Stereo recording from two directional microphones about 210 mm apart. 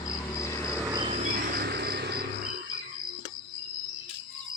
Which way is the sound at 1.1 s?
45° right (ahead or behind).